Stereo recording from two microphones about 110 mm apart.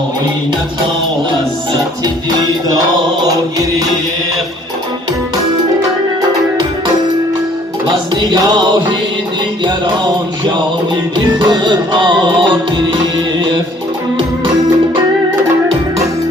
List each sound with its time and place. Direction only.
8.1 s music: 40° right (ahead or behind)
11.3 s music: 45° right (ahead or behind)